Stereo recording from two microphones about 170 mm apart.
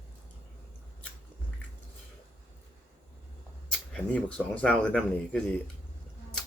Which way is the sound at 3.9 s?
10° left (ahead or behind).